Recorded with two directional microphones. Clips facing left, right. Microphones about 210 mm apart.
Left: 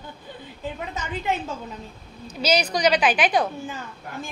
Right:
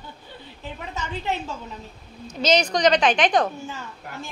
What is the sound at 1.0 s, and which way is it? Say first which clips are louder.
Speech: left 1 dB; 50° left (ahead or behind).